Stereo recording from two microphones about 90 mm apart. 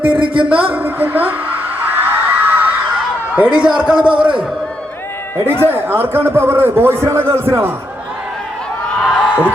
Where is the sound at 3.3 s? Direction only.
15° right (ahead or behind).